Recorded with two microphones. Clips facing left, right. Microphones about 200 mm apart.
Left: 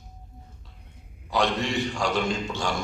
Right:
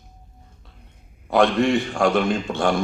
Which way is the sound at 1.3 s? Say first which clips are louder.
Right 8 dB; 55° right (ahead or behind).